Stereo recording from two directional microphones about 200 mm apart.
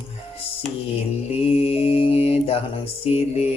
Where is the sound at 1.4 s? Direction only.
30° left (ahead or behind).